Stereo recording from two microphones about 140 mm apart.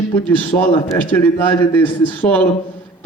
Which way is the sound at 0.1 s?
15° left (ahead or behind).